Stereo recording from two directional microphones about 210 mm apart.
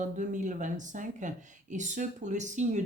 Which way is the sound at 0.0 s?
35° right (ahead or behind).